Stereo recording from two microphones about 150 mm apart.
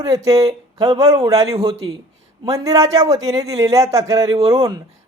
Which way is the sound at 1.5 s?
35° right (ahead or behind).